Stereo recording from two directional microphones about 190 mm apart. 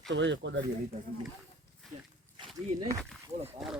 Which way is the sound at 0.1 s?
70° right (ahead or behind).